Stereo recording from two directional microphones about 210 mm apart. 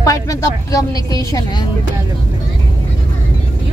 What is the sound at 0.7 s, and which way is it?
Speech, 15° left (ahead or behind).